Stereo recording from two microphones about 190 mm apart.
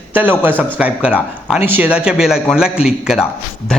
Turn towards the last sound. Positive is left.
turn(degrees=-5)  # may be behind; listen again after turning